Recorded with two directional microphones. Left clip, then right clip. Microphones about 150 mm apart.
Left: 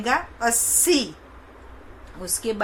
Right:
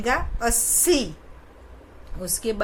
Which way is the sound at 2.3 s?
20° right (ahead or behind).